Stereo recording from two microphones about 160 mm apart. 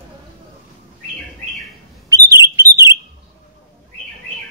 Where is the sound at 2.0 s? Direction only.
20° right (ahead or behind).